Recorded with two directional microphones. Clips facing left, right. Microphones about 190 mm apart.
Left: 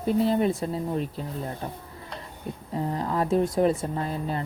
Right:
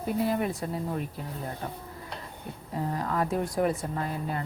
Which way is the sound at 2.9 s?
25° left (ahead or behind).